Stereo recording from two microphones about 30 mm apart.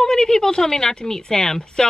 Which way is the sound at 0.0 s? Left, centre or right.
Left.